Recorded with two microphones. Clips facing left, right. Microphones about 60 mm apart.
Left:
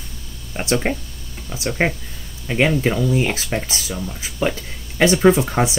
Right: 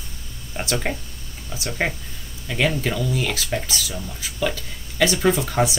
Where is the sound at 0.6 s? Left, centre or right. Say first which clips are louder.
Left 5 dB; left.